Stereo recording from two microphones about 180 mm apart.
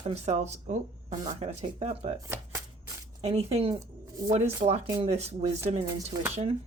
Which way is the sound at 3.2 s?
35° right (ahead or behind).